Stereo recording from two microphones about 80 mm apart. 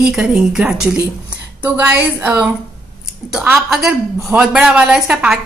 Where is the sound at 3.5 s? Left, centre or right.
Centre.